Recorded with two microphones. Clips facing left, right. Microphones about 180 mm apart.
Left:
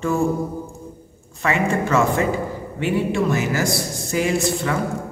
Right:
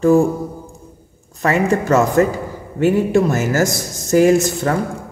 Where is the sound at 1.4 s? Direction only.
40° right (ahead or behind).